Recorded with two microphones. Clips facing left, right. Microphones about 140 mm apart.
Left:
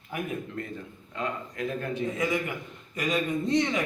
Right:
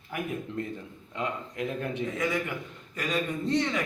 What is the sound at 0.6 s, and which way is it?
A man's voice, 20° right (ahead or behind).